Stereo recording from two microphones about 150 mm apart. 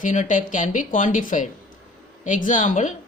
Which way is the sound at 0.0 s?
60° left (ahead or behind).